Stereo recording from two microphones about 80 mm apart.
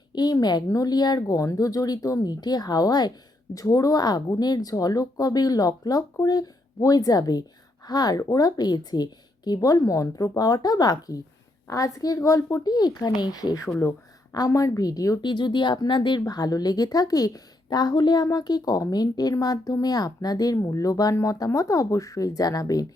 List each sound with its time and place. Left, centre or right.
0.1 s a sound: left
0.4 s speech: left
1.4 s speech: left
9.6 s speech: left
15.2 s speech: left
18.3 s speech: left